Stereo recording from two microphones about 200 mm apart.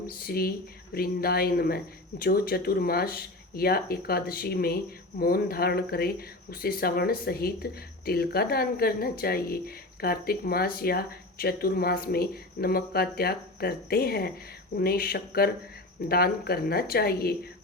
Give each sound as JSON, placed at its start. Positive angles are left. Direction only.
{"t": 0.2, "sound": "speech", "side_deg": 50}